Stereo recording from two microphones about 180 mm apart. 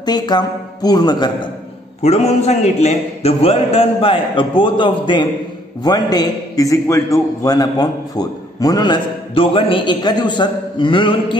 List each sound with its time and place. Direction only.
0.0 s a man's voice: 25° left (ahead or behind)
2.0 s a man's voice: 35° left (ahead or behind)